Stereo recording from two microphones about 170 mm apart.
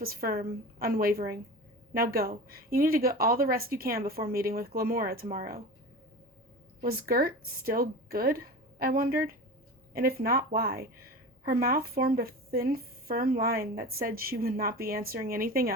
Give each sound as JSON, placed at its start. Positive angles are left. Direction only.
{"t": 0.0, "sound": "speech", "side_deg": -60}
{"t": 6.8, "sound": "speech", "side_deg": -60}